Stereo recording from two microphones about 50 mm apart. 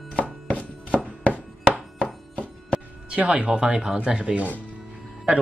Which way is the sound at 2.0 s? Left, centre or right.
Left.